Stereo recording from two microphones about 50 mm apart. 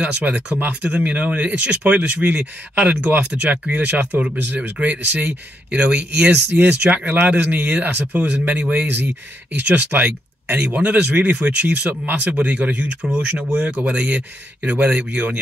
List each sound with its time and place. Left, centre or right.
0.0 s speech: right
6.5 s speech: right
7.5 s speech: right